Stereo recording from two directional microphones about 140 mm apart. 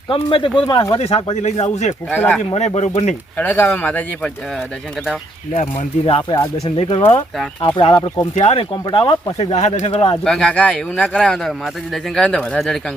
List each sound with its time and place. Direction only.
0.1 s speech: 40° left (ahead or behind)
0.7 s speech: 25° left (ahead or behind)
0.9 s speech: 45° left (ahead or behind)
2.0 s speech: 10° left (ahead or behind)
2.6 s speech: 55° left (ahead or behind)
3.3 s speech: 15° left (ahead or behind)
6.1 s speech: 35° left (ahead or behind)
9.4 s speech: 55° left (ahead or behind)
10.2 s speech: 5° left (ahead or behind)